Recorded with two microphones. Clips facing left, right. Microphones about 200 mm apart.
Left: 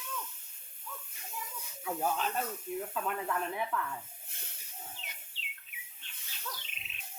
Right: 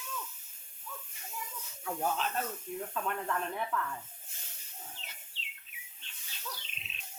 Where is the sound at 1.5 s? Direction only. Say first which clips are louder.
Left 1 dB; 5° left (ahead or behind).